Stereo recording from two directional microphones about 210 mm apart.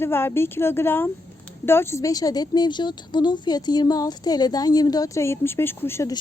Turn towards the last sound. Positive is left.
turn(degrees=15)  # may be behind; listen again after turning